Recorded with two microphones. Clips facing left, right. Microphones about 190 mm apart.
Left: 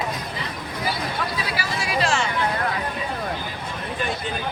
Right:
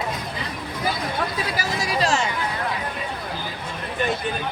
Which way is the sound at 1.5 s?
40° right (ahead or behind).